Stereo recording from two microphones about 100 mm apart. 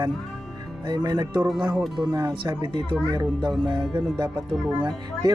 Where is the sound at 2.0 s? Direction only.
35° right (ahead or behind).